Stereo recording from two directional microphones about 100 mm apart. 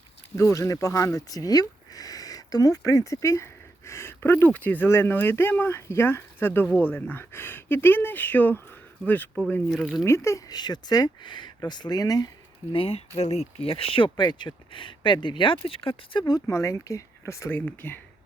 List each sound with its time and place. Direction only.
0.3 s speech: 30° left (ahead or behind)
9.7 s speech: 5° right (ahead or behind)
10.0 s speech: 30° left (ahead or behind)
12.7 s speech: 65° left (ahead or behind)
13.1 s speech: 90° left; by 15.5 s 55° left (ahead or behind)
15.6 s speech: 65° left (ahead or behind)
16.5 s speech: 30° left (ahead or behind)